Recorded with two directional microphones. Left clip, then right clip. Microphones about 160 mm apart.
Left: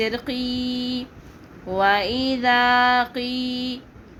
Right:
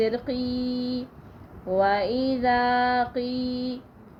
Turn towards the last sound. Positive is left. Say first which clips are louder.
# left 3 dB
turn(degrees=15)  # may be behind; listen again after turning